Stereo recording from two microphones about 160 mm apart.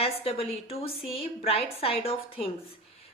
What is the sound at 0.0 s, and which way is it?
A woman's voice, 35° left (ahead or behind).